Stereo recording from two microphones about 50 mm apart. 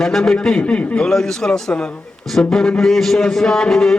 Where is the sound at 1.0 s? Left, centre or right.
Centre.